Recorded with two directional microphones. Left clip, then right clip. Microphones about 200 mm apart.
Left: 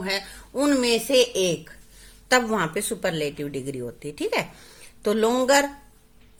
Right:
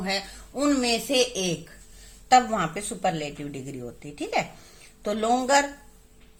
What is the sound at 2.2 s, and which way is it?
Speech, 50° left (ahead or behind).